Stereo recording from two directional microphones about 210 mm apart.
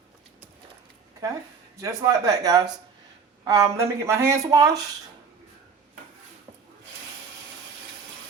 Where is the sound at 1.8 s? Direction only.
15° right (ahead or behind).